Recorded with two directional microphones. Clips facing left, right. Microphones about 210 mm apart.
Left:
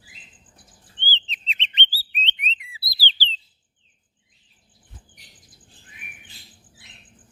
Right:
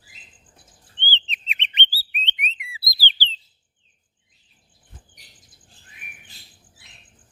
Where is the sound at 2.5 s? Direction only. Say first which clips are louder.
Left 1 dB; 10° right (ahead or behind).